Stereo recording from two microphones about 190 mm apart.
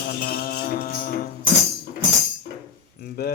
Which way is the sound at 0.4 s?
45° left (ahead or behind).